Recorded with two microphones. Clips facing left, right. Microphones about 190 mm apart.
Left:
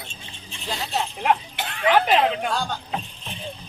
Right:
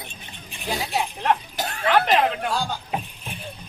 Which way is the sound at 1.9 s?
10° left (ahead or behind).